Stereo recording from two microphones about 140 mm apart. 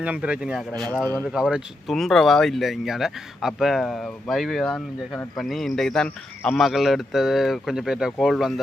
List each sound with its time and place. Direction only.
0.0 s speech: 10° right (ahead or behind)
0.7 s speech: 10° left (ahead or behind)
1.3 s speech: 5° right (ahead or behind)